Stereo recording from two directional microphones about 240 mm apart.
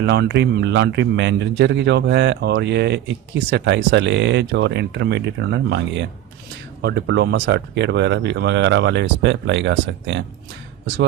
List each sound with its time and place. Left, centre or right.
0.0 s a man's voice: right